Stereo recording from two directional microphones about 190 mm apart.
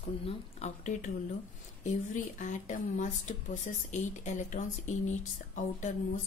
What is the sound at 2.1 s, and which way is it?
A woman's voice, 40° left (ahead or behind).